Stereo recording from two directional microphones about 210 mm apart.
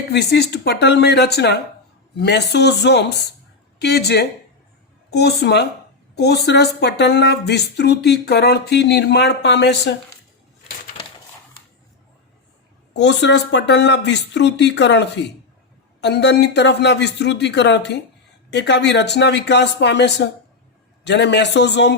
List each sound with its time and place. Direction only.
0.1 s speech: 50° left (ahead or behind)
12.9 s speech: 55° left (ahead or behind)